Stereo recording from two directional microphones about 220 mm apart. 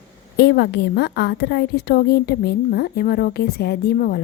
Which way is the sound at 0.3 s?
50° left (ahead or behind).